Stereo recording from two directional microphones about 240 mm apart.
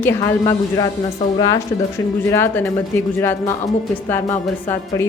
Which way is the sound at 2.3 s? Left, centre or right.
Centre.